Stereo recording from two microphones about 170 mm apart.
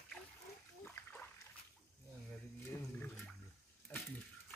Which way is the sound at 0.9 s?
10° left (ahead or behind).